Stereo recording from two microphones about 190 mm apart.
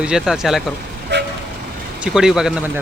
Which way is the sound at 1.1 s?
65° right (ahead or behind).